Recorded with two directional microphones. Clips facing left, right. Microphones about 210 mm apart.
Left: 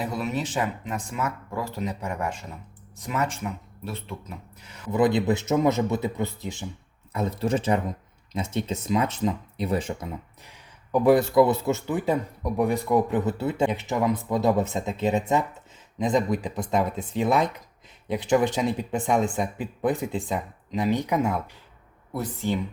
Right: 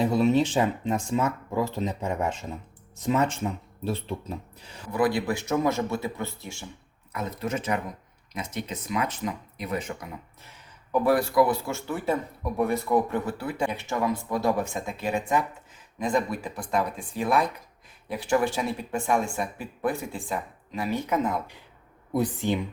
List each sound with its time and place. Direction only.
0.0 s speech: 25° right (ahead or behind)
4.9 s speech: 20° left (ahead or behind)
7.1 s speech: 30° left (ahead or behind); by 21.4 s 10° left (ahead or behind)
22.1 s speech: 15° right (ahead or behind)